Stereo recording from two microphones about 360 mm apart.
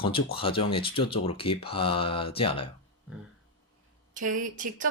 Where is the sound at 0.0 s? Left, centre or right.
Centre.